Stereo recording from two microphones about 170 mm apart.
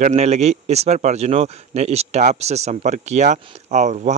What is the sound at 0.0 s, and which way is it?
A man's voice, 40° right (ahead or behind).